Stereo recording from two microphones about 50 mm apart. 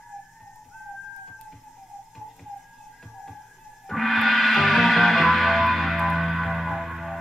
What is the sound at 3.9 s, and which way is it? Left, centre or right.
Gong, centre.